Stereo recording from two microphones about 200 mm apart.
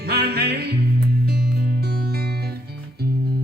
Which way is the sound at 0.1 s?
50° right (ahead or behind).